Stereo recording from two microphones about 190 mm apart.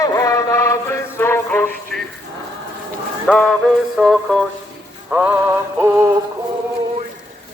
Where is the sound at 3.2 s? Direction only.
5° left (ahead or behind).